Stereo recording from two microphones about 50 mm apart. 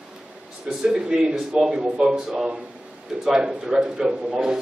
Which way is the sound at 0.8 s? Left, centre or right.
Centre.